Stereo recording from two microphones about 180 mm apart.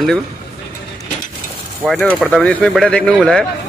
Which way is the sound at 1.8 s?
5° left (ahead or behind).